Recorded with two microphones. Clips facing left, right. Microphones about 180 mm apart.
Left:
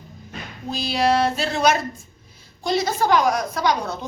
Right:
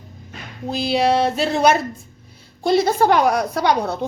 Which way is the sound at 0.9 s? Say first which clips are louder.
Right 2 dB; 25° right (ahead or behind).